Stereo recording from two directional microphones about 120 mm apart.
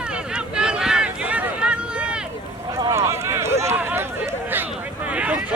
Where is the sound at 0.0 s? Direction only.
10° right (ahead or behind).